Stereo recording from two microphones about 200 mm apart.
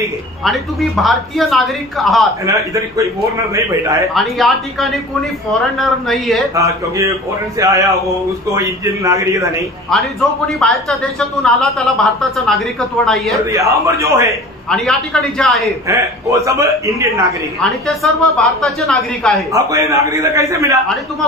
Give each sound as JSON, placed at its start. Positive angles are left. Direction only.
{"t": 0.4, "sound": "a woman's voice", "side_deg": 0}
{"t": 2.4, "sound": "a man's voice", "side_deg": -15}
{"t": 4.1, "sound": "a woman's voice", "side_deg": 0}
{"t": 6.5, "sound": "a man's voice", "side_deg": -15}
{"t": 10.6, "sound": "a woman's voice", "side_deg": 0}
{"t": 13.5, "sound": "a man's voice", "side_deg": -15}
{"t": 14.7, "sound": "a woman's voice", "side_deg": 0}
{"t": 15.9, "sound": "a man's voice", "side_deg": -15}
{"t": 17.6, "sound": "a woman's voice", "side_deg": 5}
{"t": 19.5, "sound": "a man's voice", "side_deg": -15}